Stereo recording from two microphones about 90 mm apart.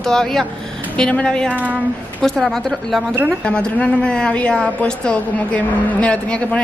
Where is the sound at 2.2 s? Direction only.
5° left (ahead or behind).